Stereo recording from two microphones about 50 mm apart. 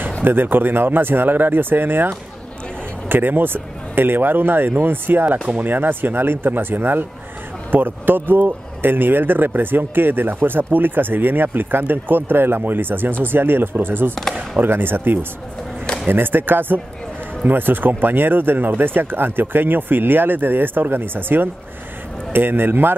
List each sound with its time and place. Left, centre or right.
0.2 s speech: right